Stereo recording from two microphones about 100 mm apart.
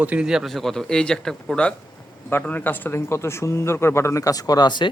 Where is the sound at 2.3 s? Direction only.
20° left (ahead or behind).